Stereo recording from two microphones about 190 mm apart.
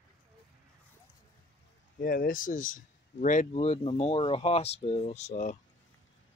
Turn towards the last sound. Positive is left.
turn(degrees=40)  # may be behind; listen again after turning